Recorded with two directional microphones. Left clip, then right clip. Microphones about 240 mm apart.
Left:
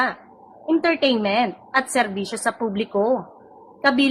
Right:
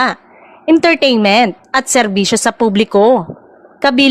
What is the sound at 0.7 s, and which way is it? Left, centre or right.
A woman's voice, right.